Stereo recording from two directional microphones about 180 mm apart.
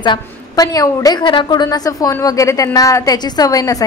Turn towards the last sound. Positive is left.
turn(degrees=20)  # may be behind; listen again after turning